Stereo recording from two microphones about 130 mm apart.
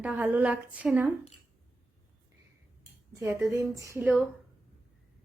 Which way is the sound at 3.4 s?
25° right (ahead or behind).